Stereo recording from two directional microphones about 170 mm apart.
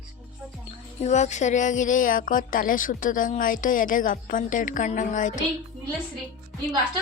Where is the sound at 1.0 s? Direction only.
45° left (ahead or behind).